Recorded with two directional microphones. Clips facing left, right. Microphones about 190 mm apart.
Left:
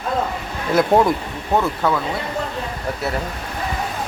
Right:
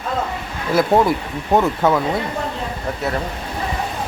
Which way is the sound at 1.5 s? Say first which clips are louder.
Right 3 dB; 15° right (ahead or behind).